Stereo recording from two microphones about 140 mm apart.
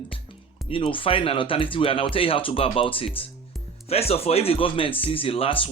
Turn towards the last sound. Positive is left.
turn(degrees=40)  # may be behind; listen again after turning